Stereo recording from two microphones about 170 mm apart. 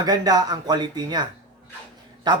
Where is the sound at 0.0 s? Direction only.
25° right (ahead or behind).